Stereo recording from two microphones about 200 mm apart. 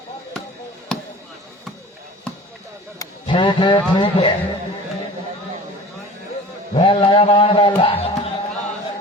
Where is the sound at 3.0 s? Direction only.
25° left (ahead or behind).